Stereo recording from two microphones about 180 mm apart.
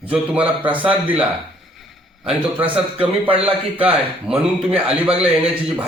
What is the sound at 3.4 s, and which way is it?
A man's voice, 10° right (ahead or behind).